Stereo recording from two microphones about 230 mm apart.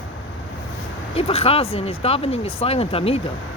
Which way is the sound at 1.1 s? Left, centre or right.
Left.